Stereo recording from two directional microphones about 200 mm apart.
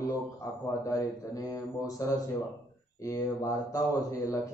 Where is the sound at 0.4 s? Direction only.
15° left (ahead or behind).